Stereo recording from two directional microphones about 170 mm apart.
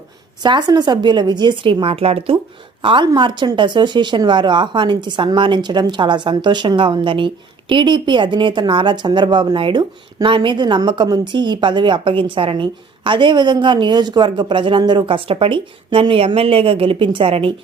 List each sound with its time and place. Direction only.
0.4 s a woman's voice: 25° right (ahead or behind)